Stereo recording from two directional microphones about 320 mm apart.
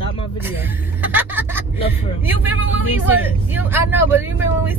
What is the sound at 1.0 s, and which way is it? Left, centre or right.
Speech, centre.